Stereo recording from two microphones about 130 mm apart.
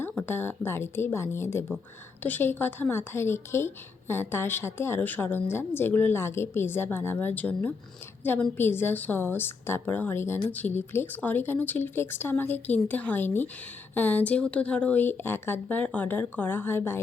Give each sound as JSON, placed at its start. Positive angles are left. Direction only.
{"t": 0.2, "sound": "a woman's voice", "side_deg": 15}